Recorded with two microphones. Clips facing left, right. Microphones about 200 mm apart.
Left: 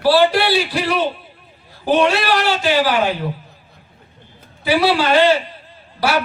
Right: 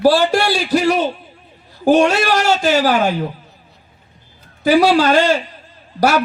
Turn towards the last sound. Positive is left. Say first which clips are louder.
# right 4 dB
turn(degrees=-45)  # may be behind; listen again after turning